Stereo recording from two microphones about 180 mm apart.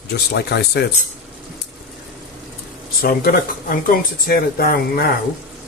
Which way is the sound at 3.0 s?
55° left (ahead or behind).